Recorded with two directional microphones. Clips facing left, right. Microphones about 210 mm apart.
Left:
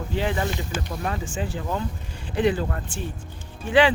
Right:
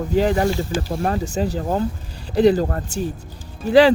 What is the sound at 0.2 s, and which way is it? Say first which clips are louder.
Speech: right 8 dB; 40° right (ahead or behind).